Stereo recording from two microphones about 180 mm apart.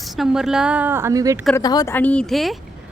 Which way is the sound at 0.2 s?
5° right (ahead or behind).